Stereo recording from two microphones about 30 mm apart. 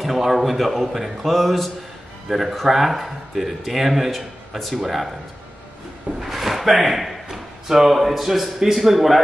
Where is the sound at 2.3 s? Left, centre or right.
Centre.